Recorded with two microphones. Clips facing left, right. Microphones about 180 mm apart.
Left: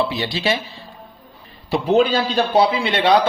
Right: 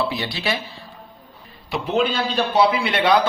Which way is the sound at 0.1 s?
20° left (ahead or behind).